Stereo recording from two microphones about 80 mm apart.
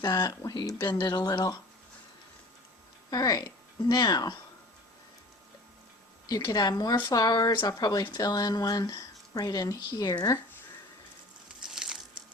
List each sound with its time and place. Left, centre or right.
0.1 s speech: left
3.1 s speech: left
6.2 s speech: left
11.6 s a sound: centre